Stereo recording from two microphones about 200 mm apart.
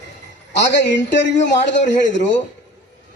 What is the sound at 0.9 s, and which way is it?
Speech, 60° left (ahead or behind).